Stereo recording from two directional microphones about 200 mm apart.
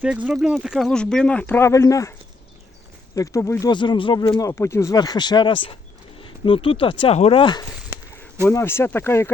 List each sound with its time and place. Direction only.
0.3 s speech: centre (ahead or behind); by 2.1 s 15° left (ahead or behind)
3.2 s speech: 15° left (ahead or behind)
7.9 s a sound: 10° right (ahead or behind)
8.4 s speech: 10° left (ahead or behind)